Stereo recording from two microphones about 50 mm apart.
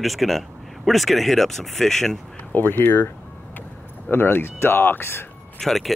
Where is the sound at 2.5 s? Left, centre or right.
Left.